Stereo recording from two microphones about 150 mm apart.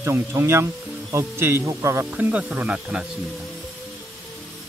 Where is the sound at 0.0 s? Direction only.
20° right (ahead or behind).